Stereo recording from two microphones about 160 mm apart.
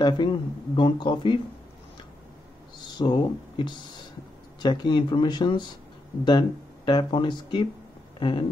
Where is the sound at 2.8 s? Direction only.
30° left (ahead or behind).